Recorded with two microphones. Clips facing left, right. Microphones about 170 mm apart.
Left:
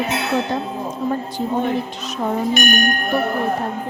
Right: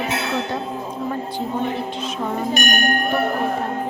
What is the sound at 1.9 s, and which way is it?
Speech, 40° left (ahead or behind).